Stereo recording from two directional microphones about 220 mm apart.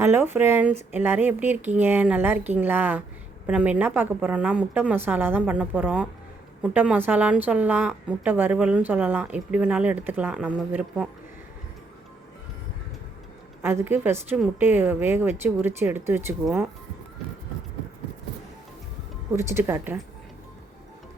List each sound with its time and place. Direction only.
0.0 s a woman's voice: 10° right (ahead or behind)
13.6 s a woman's voice: 10° right (ahead or behind)
19.4 s a woman's voice: 10° right (ahead or behind)